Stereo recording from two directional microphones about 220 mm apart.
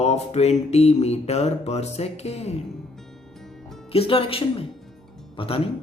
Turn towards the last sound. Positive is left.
turn(degrees=25)  # may be behind; listen again after turning